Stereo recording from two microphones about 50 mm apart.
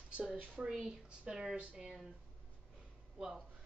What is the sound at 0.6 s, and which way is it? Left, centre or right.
Speech, centre.